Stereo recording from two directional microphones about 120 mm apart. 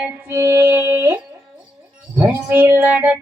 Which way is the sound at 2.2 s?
15° right (ahead or behind).